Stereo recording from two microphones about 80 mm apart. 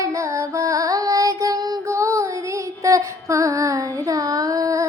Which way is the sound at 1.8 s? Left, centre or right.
Right.